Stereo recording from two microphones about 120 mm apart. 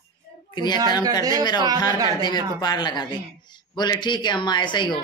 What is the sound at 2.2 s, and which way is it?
Speech, 35° left (ahead or behind).